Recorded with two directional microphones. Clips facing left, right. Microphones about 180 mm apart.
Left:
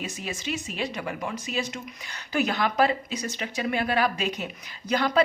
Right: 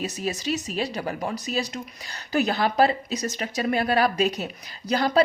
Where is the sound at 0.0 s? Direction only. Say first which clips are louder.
Right 5 dB; 35° right (ahead or behind).